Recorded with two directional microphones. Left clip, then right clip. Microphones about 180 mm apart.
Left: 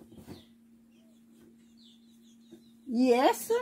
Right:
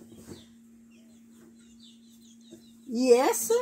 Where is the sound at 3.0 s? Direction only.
25° left (ahead or behind).